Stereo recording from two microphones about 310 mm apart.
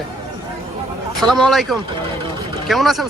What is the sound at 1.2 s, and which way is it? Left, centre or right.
Speech, centre.